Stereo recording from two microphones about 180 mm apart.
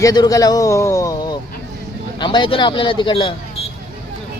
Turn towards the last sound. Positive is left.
turn(degrees=30)  # may be behind; listen again after turning